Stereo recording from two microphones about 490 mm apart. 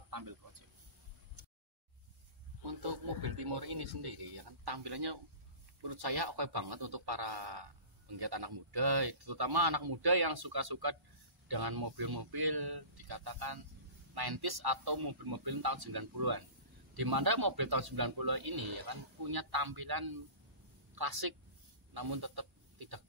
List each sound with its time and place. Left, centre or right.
0.1 s speech: right
2.6 s a man's voice: right